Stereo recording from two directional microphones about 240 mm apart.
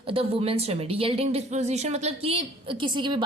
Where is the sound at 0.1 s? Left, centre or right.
Right.